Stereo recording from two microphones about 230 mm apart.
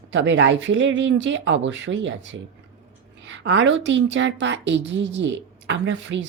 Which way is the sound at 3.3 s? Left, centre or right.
Right.